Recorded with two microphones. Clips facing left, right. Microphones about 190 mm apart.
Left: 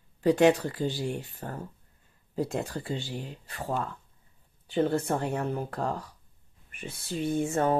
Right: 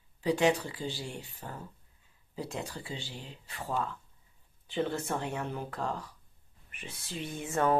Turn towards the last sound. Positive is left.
turn(degrees=40)  # may be behind; listen again after turning